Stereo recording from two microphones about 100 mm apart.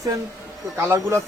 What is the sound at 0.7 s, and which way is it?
Speech, 25° right (ahead or behind).